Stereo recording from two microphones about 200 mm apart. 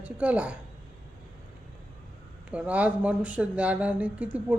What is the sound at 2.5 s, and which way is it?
Speech, 5° right (ahead or behind).